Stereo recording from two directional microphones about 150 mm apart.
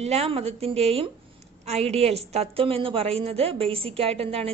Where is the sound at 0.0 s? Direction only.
45° right (ahead or behind).